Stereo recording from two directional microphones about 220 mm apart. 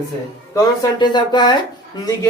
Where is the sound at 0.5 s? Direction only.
15° left (ahead or behind).